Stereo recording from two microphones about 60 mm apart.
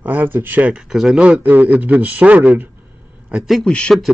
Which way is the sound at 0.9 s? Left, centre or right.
Centre.